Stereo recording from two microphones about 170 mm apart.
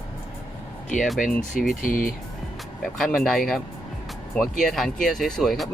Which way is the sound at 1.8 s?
55° left (ahead or behind).